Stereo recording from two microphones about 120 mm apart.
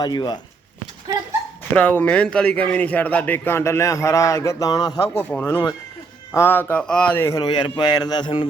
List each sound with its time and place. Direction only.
0.0 s speech: 35° left (ahead or behind)
1.7 s a man's voice: 15° left (ahead or behind); by 4.9 s 30° left (ahead or behind)
5.0 s a man's voice: 15° left (ahead or behind)
7.2 s a man's voice: 25° left (ahead or behind)
7.5 s speech: 35° left (ahead or behind)